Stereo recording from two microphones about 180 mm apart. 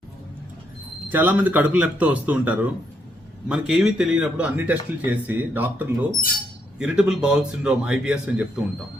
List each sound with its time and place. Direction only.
1.1 s speech: 10° right (ahead or behind)